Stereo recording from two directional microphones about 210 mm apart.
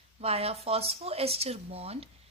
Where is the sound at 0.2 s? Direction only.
30° right (ahead or behind).